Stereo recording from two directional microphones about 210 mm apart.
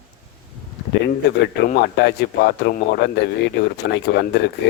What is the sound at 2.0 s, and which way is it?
Speech, 55° left (ahead or behind).